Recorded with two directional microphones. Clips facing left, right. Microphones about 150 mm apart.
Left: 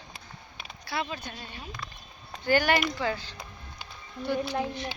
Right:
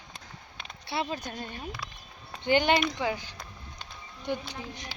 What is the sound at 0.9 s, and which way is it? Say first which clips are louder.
Speech: right 1 dB; 30° right (ahead or behind).